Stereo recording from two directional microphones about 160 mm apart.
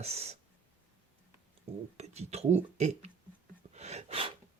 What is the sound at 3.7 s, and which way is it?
Gasp, 45° right (ahead or behind).